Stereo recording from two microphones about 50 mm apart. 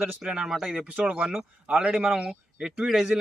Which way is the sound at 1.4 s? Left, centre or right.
Right.